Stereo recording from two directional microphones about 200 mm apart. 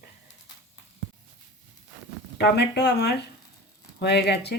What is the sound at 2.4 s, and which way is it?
Speech, 55° left (ahead or behind).